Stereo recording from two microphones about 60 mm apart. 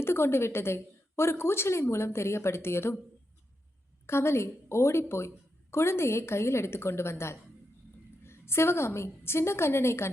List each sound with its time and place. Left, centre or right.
0.0 s a woman's voice: left
4.0 s a woman's voice: left